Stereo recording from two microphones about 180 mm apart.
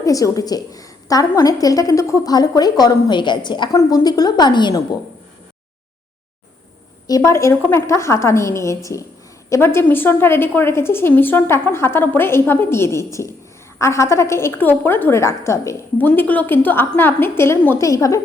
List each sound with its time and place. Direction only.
0.0 s a woman's voice: 20° left (ahead or behind)
7.1 s a woman's voice: 15° left (ahead or behind)